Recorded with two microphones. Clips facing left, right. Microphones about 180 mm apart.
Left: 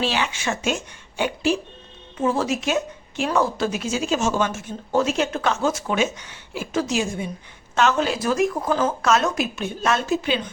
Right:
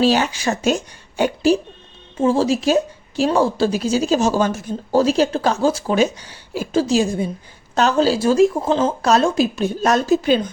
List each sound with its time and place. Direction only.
0.0 s a woman's voice: 40° right (ahead or behind)
2.1 s a woman's voice: 30° right (ahead or behind)